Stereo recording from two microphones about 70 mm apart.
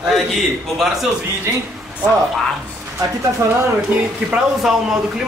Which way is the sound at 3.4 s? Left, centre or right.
Right.